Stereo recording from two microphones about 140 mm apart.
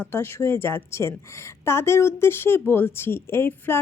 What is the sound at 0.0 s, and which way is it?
A woman's voice, 15° left (ahead or behind).